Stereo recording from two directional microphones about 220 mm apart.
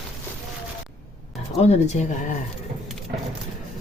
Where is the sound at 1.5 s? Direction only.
30° left (ahead or behind).